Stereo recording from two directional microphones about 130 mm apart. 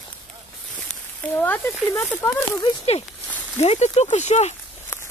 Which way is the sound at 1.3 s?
15° left (ahead or behind).